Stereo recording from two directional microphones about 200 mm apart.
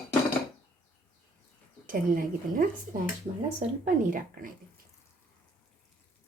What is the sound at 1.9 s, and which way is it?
A woman's voice, 45° right (ahead or behind).